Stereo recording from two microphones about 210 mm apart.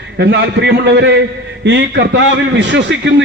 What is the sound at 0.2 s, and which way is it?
A man's voice, 55° right (ahead or behind).